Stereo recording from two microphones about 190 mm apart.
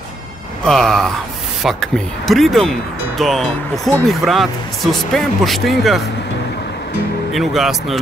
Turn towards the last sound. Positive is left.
turn(degrees=0)  # may be behind; listen again after turning